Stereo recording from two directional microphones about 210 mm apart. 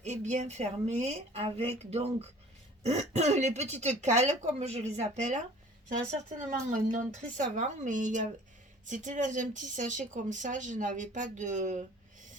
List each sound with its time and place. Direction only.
0.0 s speech: 35° right (ahead or behind)